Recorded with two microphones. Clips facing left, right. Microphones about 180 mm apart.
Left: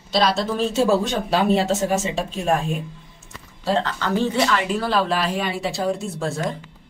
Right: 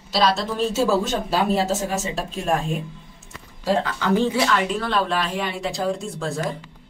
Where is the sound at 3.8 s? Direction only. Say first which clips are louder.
Right 2 dB; 10° right (ahead or behind).